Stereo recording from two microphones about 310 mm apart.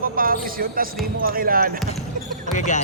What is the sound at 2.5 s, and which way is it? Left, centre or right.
Speech, left.